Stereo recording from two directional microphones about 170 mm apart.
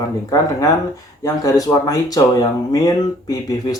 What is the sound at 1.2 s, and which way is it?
Speech, 20° left (ahead or behind).